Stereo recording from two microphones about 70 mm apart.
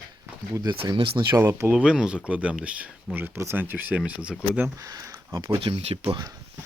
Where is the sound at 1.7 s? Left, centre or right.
Centre.